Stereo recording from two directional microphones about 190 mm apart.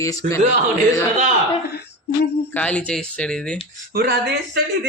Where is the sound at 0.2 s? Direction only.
40° right (ahead or behind).